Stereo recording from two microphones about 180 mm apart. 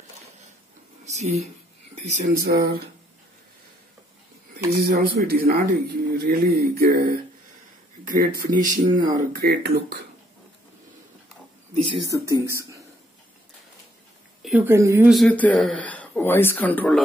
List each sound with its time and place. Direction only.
1.0 s speech: 40° right (ahead or behind)
2.1 s speech: 55° right (ahead or behind)
4.7 s speech: 55° right (ahead or behind)
11.7 s speech: 30° right (ahead or behind)
12.1 s speech: 15° right (ahead or behind)
14.4 s a sound: 5° right (ahead or behind)
14.7 s speech: 15° right (ahead or behind)
15.0 s speech: 5° left (ahead or behind)